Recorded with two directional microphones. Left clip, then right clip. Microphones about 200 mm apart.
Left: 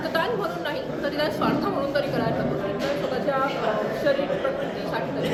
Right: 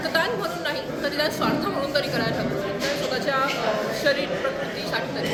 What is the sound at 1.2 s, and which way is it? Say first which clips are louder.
Speech: even; 5° left (ahead or behind).